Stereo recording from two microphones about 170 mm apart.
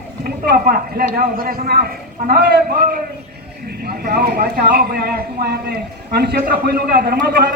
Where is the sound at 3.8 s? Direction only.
65° right (ahead or behind).